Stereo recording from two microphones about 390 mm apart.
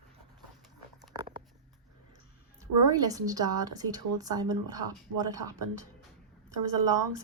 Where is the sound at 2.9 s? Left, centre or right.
Centre.